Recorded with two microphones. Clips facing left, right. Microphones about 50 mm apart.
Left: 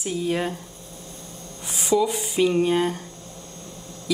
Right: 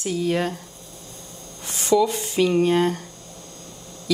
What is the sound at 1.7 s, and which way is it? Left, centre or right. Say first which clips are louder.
A woman's voice: right 2 dB; centre.